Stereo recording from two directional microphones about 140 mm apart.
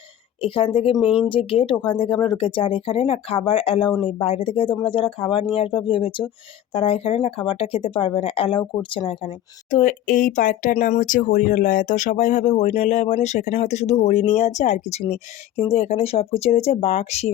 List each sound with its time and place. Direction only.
0.4 s speech: 40° left (ahead or behind)
9.6 s speech: 65° left (ahead or behind); by 17.2 s 50° left (ahead or behind)